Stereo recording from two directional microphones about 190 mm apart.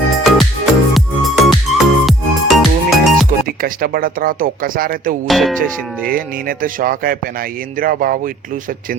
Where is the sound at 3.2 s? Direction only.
50° right (ahead or behind).